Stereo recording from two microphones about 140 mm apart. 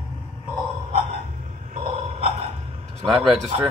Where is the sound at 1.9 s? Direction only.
45° right (ahead or behind).